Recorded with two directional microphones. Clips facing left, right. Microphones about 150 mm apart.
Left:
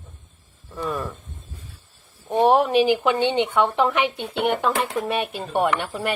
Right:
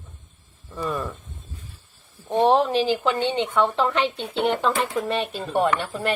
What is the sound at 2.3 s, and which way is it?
Speech, 10° left (ahead or behind).